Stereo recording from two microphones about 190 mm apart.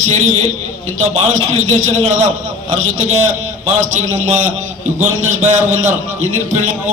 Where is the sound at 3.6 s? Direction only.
40° right (ahead or behind).